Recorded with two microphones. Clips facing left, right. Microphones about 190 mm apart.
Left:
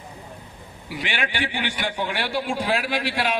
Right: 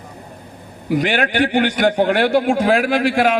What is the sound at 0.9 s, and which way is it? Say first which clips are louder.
A man's voice: right 11 dB; 45° right (ahead or behind).